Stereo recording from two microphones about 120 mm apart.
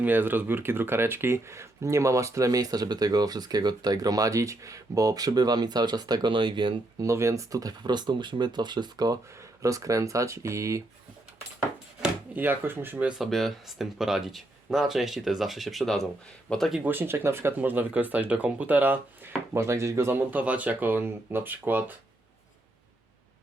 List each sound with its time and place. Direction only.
0.0 s speech: 15° right (ahead or behind); by 6.7 s 45° right (ahead or behind)
7.0 s speech: 25° right (ahead or behind)
12.3 s speech: 15° right (ahead or behind); by 16.8 s centre (ahead or behind)
16.8 s speech: 15° right (ahead or behind)